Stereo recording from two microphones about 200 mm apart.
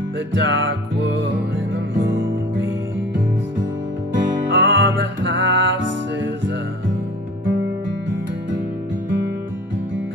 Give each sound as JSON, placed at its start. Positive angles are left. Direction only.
{"t": 0.3, "sound": "music", "side_deg": -65}
{"t": 4.1, "sound": "music", "side_deg": -70}